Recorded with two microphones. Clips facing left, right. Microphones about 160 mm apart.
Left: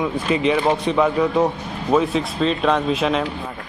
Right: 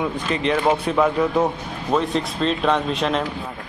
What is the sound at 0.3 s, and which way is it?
A man's voice, 5° left (ahead or behind).